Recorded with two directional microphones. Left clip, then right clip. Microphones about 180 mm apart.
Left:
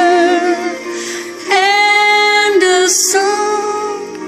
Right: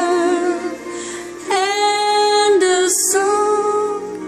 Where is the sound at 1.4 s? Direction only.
20° right (ahead or behind).